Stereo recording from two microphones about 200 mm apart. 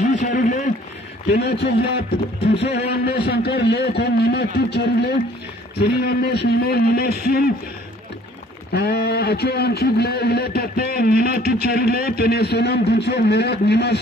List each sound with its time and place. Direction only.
0.2 s a sound: 40° left (ahead or behind)
1.3 s a man's voice: 55° left (ahead or behind)
8.7 s a man's voice: 55° left (ahead or behind)